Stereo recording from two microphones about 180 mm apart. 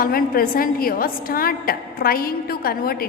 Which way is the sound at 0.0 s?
55° left (ahead or behind).